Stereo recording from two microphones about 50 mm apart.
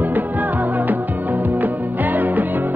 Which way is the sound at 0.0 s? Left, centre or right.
Right.